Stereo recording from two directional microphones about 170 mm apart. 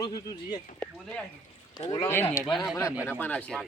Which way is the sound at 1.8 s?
20° left (ahead or behind).